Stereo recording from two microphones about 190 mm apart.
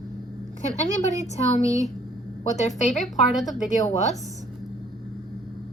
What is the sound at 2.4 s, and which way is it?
Speech, 40° left (ahead or behind).